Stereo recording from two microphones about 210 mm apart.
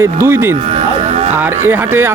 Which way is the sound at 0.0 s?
10° right (ahead or behind).